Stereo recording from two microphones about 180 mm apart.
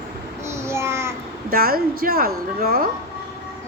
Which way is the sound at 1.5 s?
55° right (ahead or behind).